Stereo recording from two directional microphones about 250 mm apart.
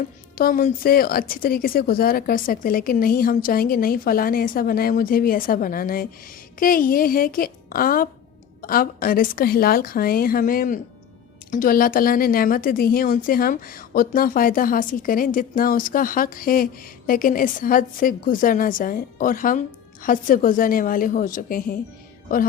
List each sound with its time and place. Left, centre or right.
0.3 s a woman's voice: left